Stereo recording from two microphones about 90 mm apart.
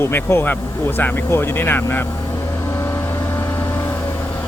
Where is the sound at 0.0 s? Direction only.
25° left (ahead or behind).